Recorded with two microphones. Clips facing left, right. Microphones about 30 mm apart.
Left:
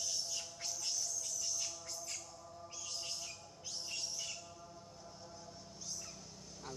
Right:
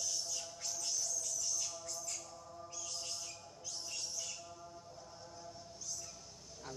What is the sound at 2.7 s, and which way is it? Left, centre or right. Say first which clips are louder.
Bird: left 1 dB; left.